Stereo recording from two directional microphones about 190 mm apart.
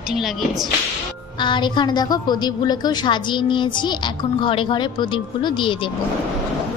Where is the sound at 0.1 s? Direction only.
Centre (ahead or behind).